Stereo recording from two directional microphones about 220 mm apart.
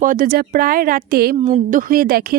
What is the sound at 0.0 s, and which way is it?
A woman's voice, 40° right (ahead or behind).